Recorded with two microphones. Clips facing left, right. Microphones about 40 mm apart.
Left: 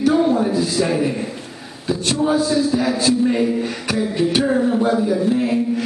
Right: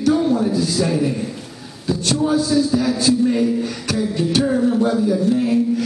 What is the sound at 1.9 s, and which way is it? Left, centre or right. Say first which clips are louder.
Music: even; centre.